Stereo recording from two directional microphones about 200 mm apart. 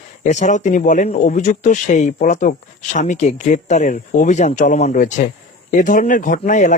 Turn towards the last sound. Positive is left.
turn(degrees=40)  # may be behind; listen again after turning